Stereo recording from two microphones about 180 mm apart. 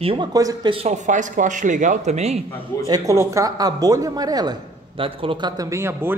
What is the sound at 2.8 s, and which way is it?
A man's voice, 20° right (ahead or behind).